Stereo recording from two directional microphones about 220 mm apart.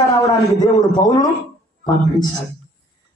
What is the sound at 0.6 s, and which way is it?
Speech, 20° left (ahead or behind).